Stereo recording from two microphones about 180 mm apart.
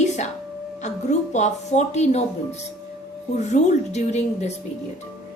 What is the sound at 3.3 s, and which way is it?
Speech, 40° left (ahead or behind).